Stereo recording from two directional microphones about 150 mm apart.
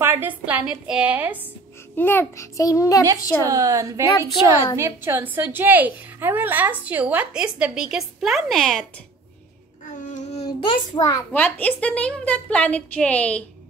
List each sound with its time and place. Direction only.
0.0 s a woman's voice: 15° right (ahead or behind)
2.0 s a child's voice: 15° left (ahead or behind)
3.4 s a woman's voice: 20° right (ahead or behind); by 8.8 s centre (ahead or behind)
9.9 s a sound: 55° left (ahead or behind)
10.4 s child singing: 30° left (ahead or behind)
11.3 s a woman's voice: 10° left (ahead or behind)